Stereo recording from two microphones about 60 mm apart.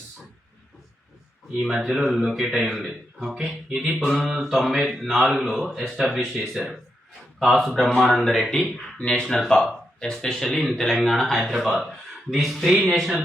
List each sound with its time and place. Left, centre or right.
1.6 s a man's voice: centre
9.0 s speech: centre
9.4 s speech: centre